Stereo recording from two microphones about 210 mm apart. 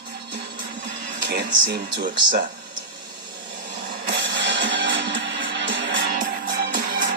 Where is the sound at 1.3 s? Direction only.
55° right (ahead or behind).